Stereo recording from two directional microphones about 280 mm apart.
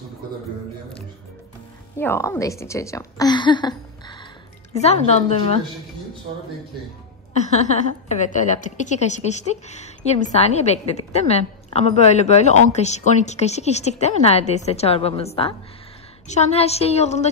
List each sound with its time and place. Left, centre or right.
2.0 s a woman's voice: centre
7.3 s a woman's voice: left